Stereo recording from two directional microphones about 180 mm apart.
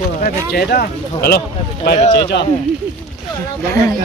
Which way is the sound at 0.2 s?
60° left (ahead or behind).